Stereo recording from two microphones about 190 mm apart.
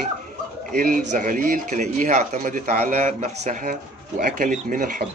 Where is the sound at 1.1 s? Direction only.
45° right (ahead or behind).